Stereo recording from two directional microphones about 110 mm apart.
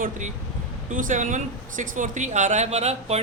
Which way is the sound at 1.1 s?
90° right.